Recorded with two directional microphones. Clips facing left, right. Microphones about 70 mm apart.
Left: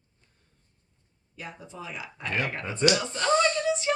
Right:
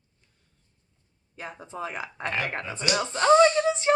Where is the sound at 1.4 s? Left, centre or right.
Right.